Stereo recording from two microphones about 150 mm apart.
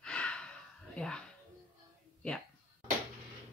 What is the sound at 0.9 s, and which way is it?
Speech, 5° left (ahead or behind).